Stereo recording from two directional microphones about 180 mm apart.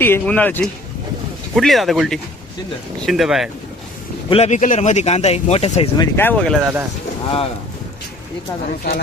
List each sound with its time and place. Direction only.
0.0 s speech: 10° left (ahead or behind)
4.3 s speech: 35° left (ahead or behind)
6.0 s speech: 10° left (ahead or behind)
6.6 s speech: 10° right (ahead or behind)